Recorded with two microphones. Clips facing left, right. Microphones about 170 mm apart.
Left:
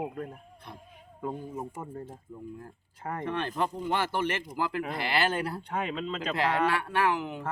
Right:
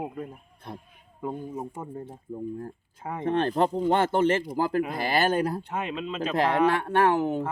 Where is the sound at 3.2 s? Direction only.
50° right (ahead or behind).